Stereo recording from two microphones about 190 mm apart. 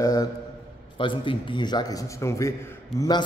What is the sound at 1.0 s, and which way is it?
A man's voice, 25° left (ahead or behind).